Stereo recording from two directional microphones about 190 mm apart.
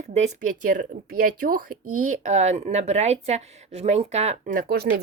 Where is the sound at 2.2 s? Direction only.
35° right (ahead or behind).